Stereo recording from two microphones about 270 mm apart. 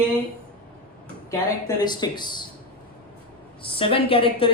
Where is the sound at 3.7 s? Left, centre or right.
Centre.